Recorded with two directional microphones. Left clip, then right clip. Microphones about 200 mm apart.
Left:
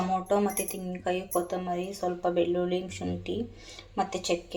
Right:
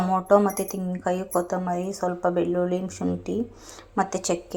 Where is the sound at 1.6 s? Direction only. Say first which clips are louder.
Right 4 dB; 10° right (ahead or behind).